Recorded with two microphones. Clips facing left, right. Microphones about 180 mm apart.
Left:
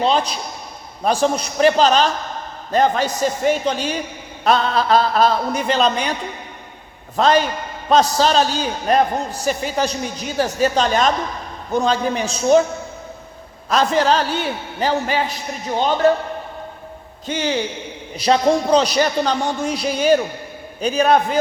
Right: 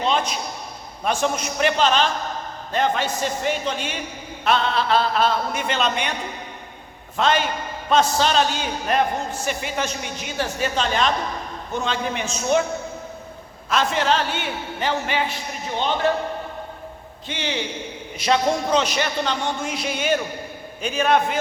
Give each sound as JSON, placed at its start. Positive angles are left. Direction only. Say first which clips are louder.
{"t": 0.0, "sound": "a man's voice", "louder": "left 4 dB", "side_deg": 35}
{"t": 7.2, "sound": "a man's voice", "louder": "left 5 dB", "side_deg": 40}
{"t": 13.7, "sound": "a man's voice", "louder": "left 4 dB", "side_deg": 40}
{"t": 17.2, "sound": "a man's voice", "louder": "left 6 dB", "side_deg": 40}